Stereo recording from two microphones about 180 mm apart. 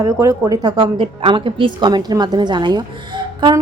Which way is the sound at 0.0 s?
15° right (ahead or behind).